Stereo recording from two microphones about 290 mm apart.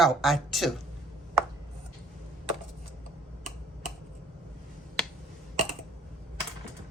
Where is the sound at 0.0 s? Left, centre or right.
Centre.